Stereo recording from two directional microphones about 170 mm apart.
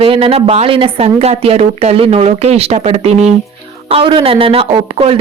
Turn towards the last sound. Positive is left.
turn(degrees=-30)  # may be behind; listen again after turning